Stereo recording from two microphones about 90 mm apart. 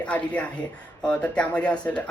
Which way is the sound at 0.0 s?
15° left (ahead or behind).